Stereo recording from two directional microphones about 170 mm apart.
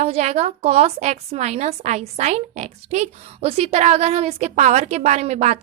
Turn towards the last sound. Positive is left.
turn(degrees=-40)  # may be behind; listen again after turning